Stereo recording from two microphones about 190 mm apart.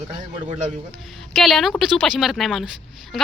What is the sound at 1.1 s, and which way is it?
Speech, centre (ahead or behind).